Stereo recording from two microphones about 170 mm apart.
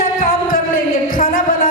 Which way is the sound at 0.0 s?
55° left (ahead or behind).